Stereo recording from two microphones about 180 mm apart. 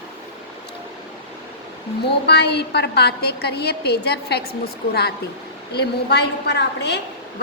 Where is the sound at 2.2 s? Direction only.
65° left (ahead or behind).